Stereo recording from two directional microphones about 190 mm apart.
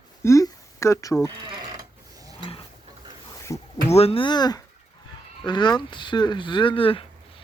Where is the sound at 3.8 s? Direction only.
35° left (ahead or behind).